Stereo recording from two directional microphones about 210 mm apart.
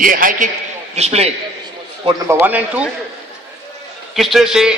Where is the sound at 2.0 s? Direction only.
15° right (ahead or behind).